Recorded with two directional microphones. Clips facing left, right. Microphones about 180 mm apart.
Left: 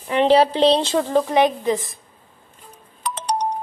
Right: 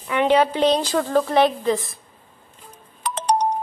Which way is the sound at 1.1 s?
15° left (ahead or behind).